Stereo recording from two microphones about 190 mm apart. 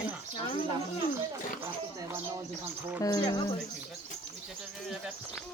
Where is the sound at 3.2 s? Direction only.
25° left (ahead or behind).